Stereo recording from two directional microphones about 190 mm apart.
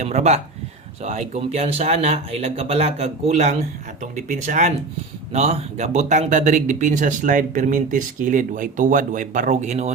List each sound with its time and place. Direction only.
0.0 s speech: 35° right (ahead or behind)